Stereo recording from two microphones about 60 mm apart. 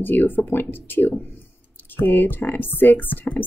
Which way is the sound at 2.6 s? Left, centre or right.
Left.